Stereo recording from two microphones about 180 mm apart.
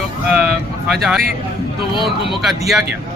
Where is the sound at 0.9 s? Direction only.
Centre (ahead or behind).